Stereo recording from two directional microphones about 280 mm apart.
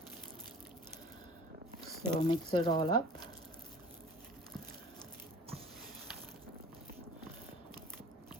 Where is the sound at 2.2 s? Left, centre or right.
Centre.